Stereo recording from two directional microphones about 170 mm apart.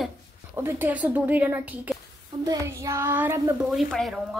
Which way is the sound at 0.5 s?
10° right (ahead or behind).